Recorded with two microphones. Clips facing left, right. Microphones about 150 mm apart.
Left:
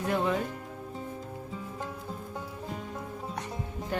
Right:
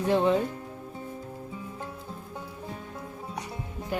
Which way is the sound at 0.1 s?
30° right (ahead or behind).